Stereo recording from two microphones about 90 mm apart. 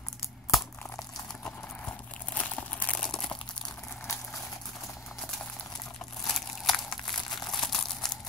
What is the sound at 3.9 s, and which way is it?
Boiling, 25° left (ahead or behind).